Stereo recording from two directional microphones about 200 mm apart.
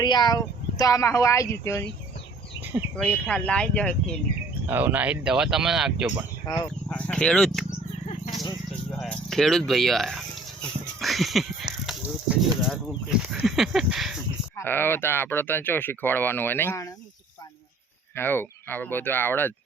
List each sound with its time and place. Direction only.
0.0 s speech: 20° left (ahead or behind)
3.0 s speech: 5° left (ahead or behind)
4.6 s speech: 10° right (ahead or behind)
8.9 s a sound: centre (ahead or behind)
13.3 s speech: centre (ahead or behind)
14.5 s speech: 10° left (ahead or behind)
18.1 s speech: 10° left (ahead or behind)